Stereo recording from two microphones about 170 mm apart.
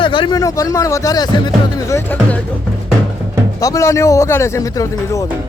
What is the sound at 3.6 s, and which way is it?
Speech, 20° left (ahead or behind).